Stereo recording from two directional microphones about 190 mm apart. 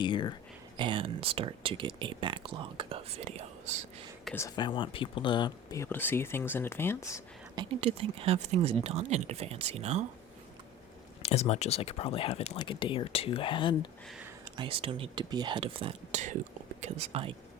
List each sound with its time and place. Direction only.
0.0 s speech: 25° left (ahead or behind)
0.8 s speech: 25° right (ahead or behind)
4.4 s speech: 20° left (ahead or behind)
7.5 s speech: 25° right (ahead or behind)
11.2 s speech: 35° left (ahead or behind)
14.1 s a sound: 5° right (ahead or behind)
14.5 s speech: 25° right (ahead or behind)